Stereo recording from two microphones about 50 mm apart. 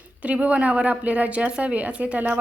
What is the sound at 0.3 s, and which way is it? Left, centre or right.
A woman's voice, right.